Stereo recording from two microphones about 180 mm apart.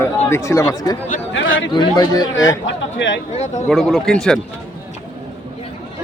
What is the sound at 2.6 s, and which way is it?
Speech, 90° left.